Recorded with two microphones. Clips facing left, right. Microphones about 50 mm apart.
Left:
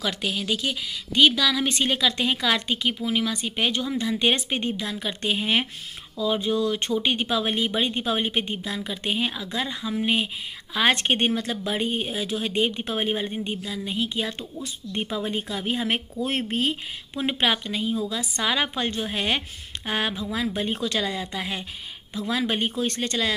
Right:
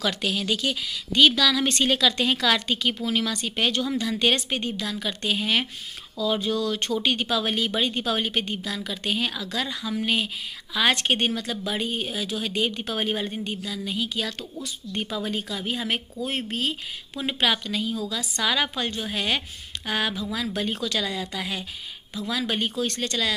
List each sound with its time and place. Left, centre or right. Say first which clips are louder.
0.0 s a woman's voice: right 1 dB; centre
20.8 s a woman's voice: left 1 dB; left